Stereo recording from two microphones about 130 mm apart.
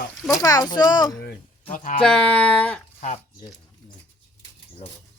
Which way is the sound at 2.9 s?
65° left (ahead or behind).